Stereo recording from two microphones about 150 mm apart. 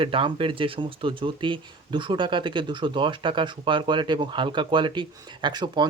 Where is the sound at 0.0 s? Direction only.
35° right (ahead or behind).